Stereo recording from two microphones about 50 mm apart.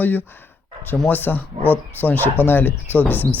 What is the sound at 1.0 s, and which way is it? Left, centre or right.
Speech, left.